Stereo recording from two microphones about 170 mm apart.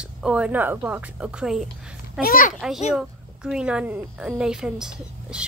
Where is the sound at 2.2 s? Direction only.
55° left (ahead or behind).